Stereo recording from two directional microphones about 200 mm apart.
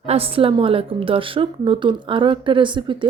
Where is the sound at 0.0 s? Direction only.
30° right (ahead or behind).